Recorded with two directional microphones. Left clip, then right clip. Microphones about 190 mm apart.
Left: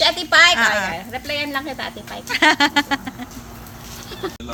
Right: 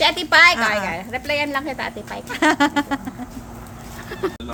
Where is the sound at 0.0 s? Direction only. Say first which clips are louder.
Even; 35° right (ahead or behind).